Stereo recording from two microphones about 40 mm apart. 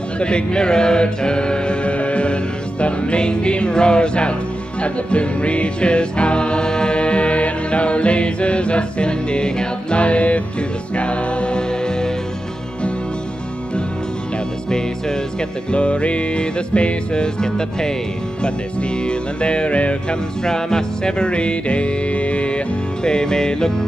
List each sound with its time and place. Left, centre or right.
0.2 s music: left
14.7 s music: centre
15.7 s music: left
20.4 s music: centre
23.0 s music: centre